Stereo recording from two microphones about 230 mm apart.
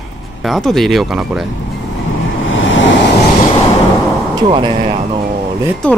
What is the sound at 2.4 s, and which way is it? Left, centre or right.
Vehicle, left.